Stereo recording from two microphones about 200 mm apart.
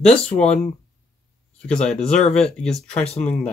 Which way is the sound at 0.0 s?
5° left (ahead or behind).